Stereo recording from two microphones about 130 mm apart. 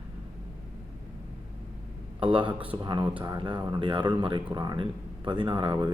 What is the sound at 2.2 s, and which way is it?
Speech, 40° right (ahead or behind).